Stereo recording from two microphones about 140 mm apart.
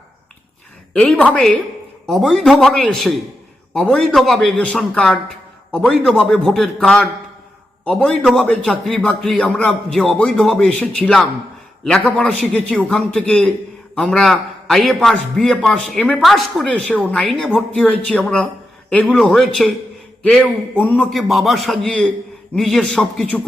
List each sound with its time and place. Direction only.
0.9 s a man's voice: 5° left (ahead or behind)
21.1 s a man's voice: centre (ahead or behind)